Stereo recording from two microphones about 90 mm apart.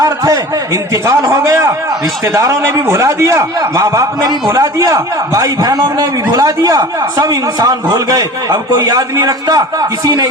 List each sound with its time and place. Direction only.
0.0 s a man's voice: 35° right (ahead or behind)